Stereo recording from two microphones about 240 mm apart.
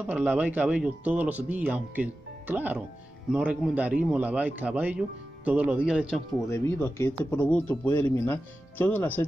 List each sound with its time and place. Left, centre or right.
0.0 s speech: centre
6.5 s speech: centre